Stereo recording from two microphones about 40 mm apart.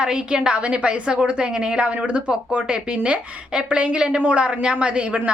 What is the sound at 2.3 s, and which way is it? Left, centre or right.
A woman's voice, right.